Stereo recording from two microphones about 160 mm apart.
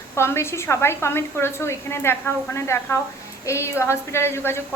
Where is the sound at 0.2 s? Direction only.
15° left (ahead or behind).